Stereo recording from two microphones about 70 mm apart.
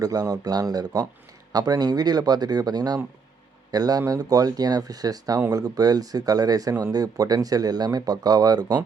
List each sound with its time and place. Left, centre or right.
0.0 s speech: right